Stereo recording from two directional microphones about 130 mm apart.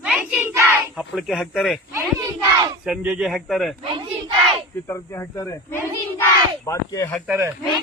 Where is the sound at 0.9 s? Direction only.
Centre (ahead or behind).